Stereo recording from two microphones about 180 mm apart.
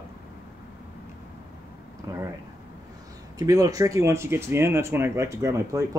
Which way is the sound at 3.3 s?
20° right (ahead or behind).